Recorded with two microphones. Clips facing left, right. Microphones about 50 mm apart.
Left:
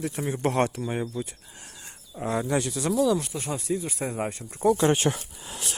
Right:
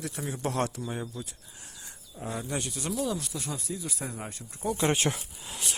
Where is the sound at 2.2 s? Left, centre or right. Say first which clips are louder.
Left 8 dB; left.